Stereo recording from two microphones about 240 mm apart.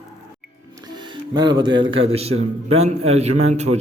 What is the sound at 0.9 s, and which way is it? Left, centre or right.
Music, centre.